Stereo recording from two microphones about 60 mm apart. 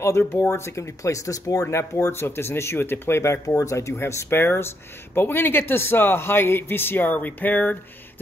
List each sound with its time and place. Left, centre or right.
0.3 s speech: left
1.7 s speech: left
4.3 s speech: left